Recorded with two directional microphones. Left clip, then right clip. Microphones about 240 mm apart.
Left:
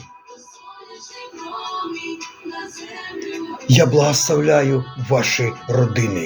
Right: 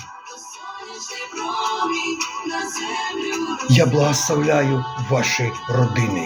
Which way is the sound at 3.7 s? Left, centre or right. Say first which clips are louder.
Left 3 dB; centre.